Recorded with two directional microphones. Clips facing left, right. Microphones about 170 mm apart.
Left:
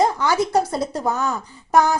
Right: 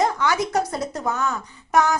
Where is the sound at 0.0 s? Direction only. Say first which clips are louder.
Left 2 dB; 30° left (ahead or behind).